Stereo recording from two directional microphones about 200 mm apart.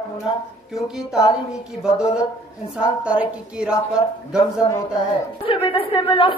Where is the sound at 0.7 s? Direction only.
Centre (ahead or behind).